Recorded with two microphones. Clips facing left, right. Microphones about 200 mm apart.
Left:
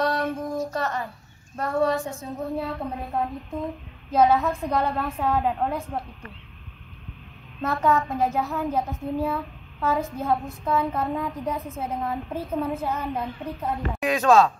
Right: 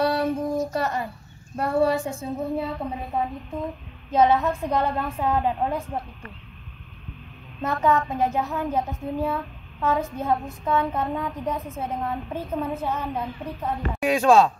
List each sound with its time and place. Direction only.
0.0 s a sound: 10° right (ahead or behind)
1.6 s a woman's voice: 10° right (ahead or behind)
7.6 s a woman's voice: centre (ahead or behind)
14.0 s a woman's voice: 10° right (ahead or behind)